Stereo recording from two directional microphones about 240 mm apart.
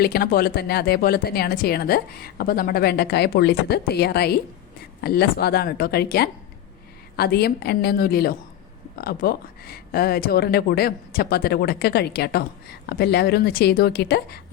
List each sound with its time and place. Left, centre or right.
0.0 s a woman's voice: left